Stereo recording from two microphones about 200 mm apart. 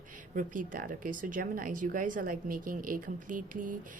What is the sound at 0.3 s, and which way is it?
A woman's voice, 40° right (ahead or behind).